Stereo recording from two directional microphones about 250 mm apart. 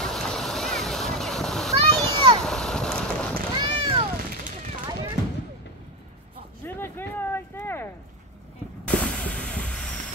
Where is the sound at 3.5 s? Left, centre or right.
Centre.